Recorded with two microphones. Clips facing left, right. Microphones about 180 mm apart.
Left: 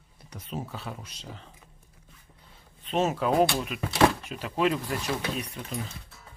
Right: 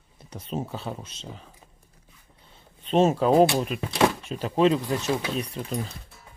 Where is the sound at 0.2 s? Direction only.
30° right (ahead or behind).